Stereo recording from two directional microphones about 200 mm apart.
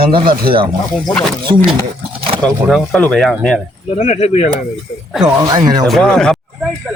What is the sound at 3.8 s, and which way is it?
Speech, 35° left (ahead or behind).